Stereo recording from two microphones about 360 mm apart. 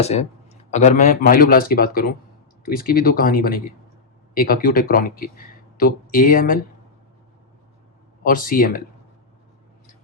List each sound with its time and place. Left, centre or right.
0.0 s speech: centre
8.2 s speech: left